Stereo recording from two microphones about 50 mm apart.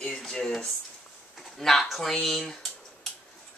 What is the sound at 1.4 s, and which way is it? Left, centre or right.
Speech, centre.